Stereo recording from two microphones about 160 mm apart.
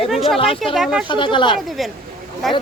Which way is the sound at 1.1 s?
30° left (ahead or behind).